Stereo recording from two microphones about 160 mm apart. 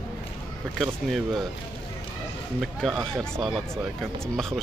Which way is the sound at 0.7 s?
Centre (ahead or behind).